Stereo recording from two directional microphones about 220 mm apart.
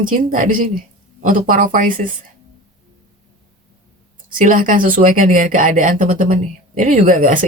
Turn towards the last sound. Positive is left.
turn(degrees=-35)  # may be behind; listen again after turning